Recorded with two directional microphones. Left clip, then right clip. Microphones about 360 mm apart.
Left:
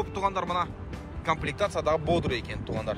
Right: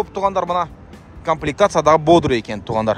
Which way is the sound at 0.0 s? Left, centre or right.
Centre.